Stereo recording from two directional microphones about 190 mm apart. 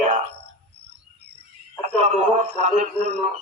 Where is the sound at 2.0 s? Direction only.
35° right (ahead or behind).